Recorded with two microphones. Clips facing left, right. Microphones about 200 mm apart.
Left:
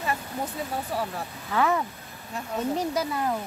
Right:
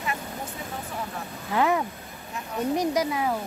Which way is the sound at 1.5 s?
15° right (ahead or behind).